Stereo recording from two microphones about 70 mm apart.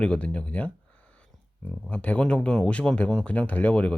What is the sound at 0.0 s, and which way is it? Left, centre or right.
Speech, centre.